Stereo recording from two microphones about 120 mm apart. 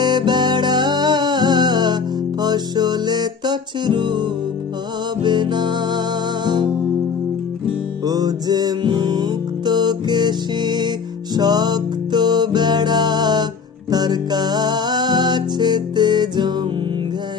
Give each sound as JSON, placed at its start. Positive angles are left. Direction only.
{"t": 0.0, "sound": "music", "side_deg": -40}
{"t": 8.0, "sound": "music", "side_deg": -30}